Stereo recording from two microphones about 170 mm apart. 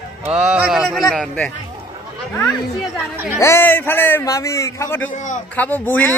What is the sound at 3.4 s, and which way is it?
A man's voice, 15° left (ahead or behind).